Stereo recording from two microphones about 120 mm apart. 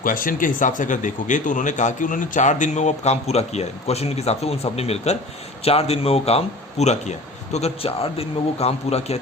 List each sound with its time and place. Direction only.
0.4 s a man's voice: 90° left; by 7.1 s 70° left (ahead or behind)
7.5 s a man's voice: 60° left (ahead or behind)